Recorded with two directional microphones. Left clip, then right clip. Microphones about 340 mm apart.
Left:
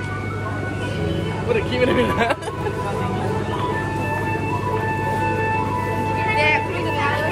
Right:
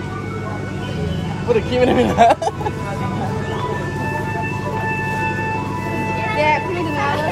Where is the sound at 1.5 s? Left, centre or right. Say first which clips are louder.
Right 4 dB; right.